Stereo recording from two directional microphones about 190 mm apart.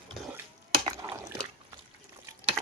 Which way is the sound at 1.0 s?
15° right (ahead or behind).